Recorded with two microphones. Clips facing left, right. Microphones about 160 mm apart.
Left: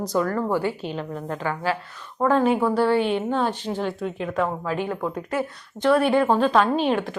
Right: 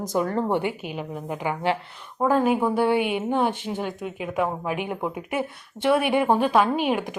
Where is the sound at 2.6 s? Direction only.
15° right (ahead or behind).